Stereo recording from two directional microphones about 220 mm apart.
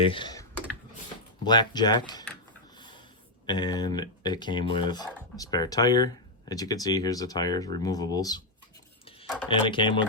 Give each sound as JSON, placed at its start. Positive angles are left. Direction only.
{"t": 0.1, "sound": "speech", "side_deg": 20}
{"t": 1.5, "sound": "speech", "side_deg": 20}
{"t": 3.4, "sound": "speech", "side_deg": 20}
{"t": 9.5, "sound": "speech", "side_deg": 20}